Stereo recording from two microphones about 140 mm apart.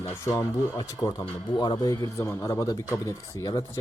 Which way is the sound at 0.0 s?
15° left (ahead or behind).